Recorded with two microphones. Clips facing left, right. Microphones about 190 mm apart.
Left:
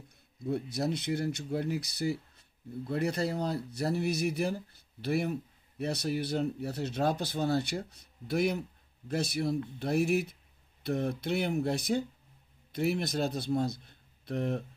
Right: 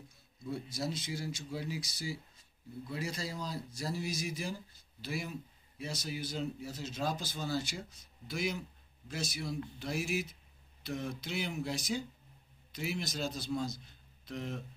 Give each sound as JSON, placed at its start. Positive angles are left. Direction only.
{"t": 0.4, "sound": "a man's voice", "side_deg": 60}